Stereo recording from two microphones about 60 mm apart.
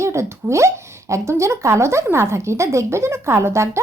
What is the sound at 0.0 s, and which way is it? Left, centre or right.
A woman's voice, right.